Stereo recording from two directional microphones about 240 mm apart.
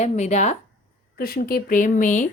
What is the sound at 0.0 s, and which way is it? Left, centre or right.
Speech, left.